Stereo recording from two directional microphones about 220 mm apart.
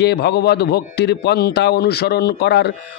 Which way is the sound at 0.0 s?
50° left (ahead or behind).